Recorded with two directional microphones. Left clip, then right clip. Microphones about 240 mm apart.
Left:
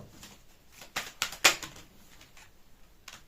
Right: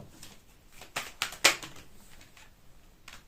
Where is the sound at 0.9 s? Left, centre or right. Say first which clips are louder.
Even; centre.